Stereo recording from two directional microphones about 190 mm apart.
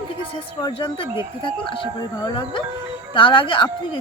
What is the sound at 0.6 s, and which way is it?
Speech, 25° left (ahead or behind).